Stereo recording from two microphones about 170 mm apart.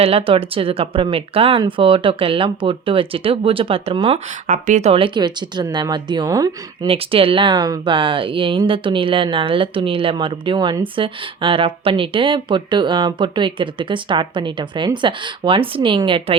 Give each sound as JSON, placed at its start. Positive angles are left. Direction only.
{"t": 0.0, "sound": "speech", "side_deg": -35}
{"t": 4.4, "sound": "speech", "side_deg": -45}
{"t": 6.8, "sound": "speech", "side_deg": -35}